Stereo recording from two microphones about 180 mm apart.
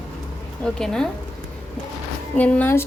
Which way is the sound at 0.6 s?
5° left (ahead or behind).